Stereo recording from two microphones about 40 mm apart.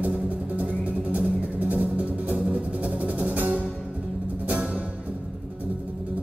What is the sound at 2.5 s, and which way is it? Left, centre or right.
Music, right.